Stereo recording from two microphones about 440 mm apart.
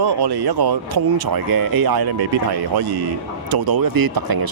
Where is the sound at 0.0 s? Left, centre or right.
Right.